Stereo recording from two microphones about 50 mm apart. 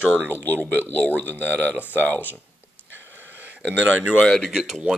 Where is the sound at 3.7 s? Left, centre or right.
Right.